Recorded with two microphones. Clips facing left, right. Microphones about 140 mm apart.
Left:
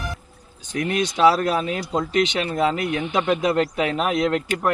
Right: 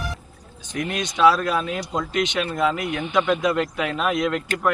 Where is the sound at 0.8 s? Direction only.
30° left (ahead or behind).